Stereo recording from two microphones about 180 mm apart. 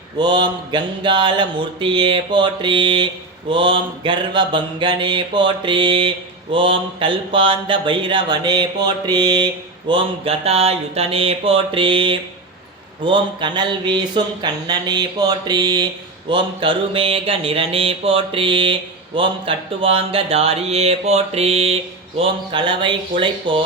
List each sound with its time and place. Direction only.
0.2 s mantra: 25° right (ahead or behind)